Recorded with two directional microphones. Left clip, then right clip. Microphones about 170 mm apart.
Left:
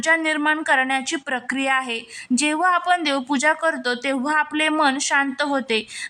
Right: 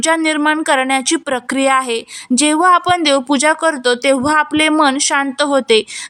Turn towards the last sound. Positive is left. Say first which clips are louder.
# right 9 dB
turn(degrees=-25)  # may be behind; listen again after turning